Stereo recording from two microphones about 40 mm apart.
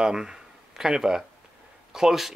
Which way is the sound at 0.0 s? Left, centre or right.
Centre.